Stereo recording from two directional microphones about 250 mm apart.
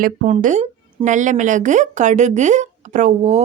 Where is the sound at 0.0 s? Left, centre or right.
Right.